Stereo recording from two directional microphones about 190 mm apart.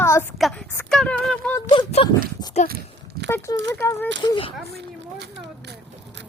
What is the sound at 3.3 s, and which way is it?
Speech, 15° left (ahead or behind).